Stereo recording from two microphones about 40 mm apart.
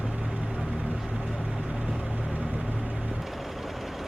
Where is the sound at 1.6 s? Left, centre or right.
Right.